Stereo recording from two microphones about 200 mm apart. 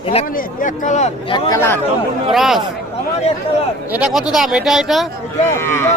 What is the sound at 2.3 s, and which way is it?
Speech, centre (ahead or behind).